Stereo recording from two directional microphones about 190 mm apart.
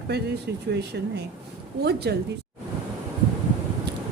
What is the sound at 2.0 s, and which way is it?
Speech, 60° right (ahead or behind).